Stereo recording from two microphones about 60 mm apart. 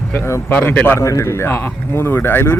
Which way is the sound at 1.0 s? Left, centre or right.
Left.